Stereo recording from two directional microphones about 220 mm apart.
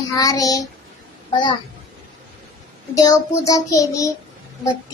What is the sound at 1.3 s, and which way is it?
Speech, 20° left (ahead or behind).